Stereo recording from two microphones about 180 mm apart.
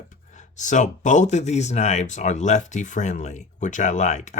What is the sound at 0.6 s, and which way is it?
Speech, 45° left (ahead or behind).